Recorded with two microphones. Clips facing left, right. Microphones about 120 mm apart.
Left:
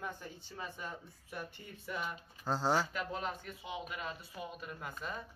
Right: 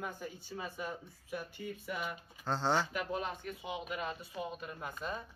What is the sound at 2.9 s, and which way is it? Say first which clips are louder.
Speech: right 2 dB; 15° right (ahead or behind).